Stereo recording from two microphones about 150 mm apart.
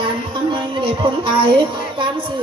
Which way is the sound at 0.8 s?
35° right (ahead or behind).